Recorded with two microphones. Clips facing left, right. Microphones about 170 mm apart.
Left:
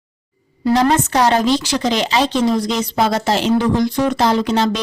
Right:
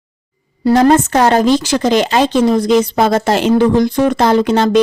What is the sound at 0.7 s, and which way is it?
A woman's voice, 50° right (ahead or behind).